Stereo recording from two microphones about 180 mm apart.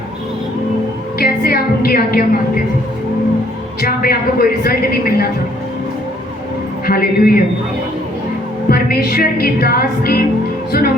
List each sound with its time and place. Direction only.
1.2 s a woman's voice: 55° left (ahead or behind)
3.8 s a woman's voice: 55° left (ahead or behind)
6.8 s a woman's voice: 55° left (ahead or behind)
8.7 s a woman's voice: 55° left (ahead or behind)